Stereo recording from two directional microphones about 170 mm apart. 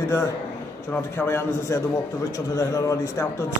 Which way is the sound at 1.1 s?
15° left (ahead or behind).